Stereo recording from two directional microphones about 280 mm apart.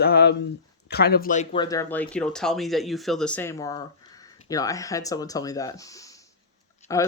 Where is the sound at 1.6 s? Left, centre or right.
Centre.